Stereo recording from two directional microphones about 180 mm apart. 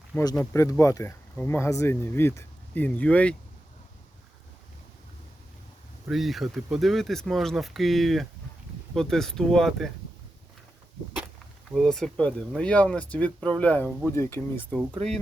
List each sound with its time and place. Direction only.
0.5 s speech: 15° left (ahead or behind)
6.1 s speech: centre (ahead or behind)
11.7 s speech: 5° left (ahead or behind)
14.9 s speech: 35° right (ahead or behind)